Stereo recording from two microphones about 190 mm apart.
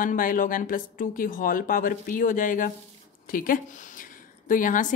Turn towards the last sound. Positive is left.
turn(degrees=45)  # may be behind; listen again after turning